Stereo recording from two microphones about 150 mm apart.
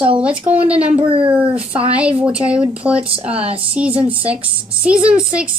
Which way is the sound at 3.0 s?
40° right (ahead or behind).